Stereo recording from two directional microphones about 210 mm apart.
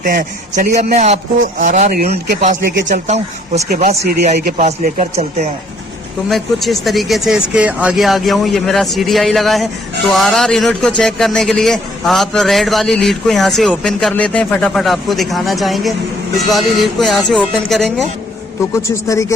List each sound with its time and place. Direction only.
0.0 s a man's voice: 40° right (ahead or behind)
6.2 s a man's voice: centre (ahead or behind)
18.7 s a man's voice: 15° left (ahead or behind)